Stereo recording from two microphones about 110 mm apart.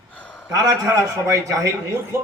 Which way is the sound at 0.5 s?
30° right (ahead or behind).